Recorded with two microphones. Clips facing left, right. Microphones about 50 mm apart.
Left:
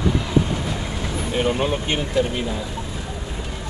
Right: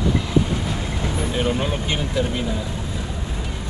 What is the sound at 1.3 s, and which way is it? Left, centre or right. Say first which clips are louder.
Speech: left 4 dB; centre.